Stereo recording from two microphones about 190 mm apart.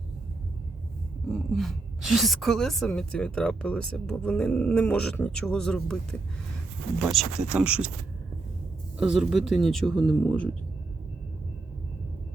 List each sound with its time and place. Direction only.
1.3 s a woman's voice: centre (ahead or behind)
9.0 s a woman's voice: 5° right (ahead or behind)